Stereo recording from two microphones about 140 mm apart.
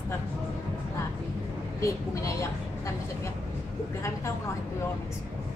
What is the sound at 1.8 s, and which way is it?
A woman's voice, 20° left (ahead or behind).